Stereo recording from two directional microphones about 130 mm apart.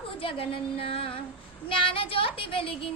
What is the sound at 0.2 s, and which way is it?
Speech, 45° left (ahead or behind).